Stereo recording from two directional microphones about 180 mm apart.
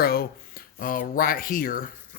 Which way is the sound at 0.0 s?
55° left (ahead or behind).